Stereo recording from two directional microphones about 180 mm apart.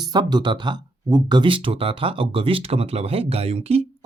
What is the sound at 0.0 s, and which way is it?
Speech, 25° right (ahead or behind).